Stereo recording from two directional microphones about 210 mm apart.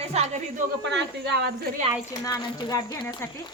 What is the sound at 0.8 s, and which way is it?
Speech, 55° right (ahead or behind).